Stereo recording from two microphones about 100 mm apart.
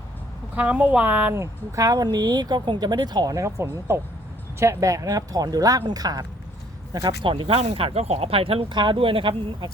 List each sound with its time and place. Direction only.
0.5 s a woman's voice: 15° right (ahead or behind); by 6.2 s 40° right (ahead or behind)
7.2 s speech: 65° right (ahead or behind)
8.7 s speech: 50° right (ahead or behind)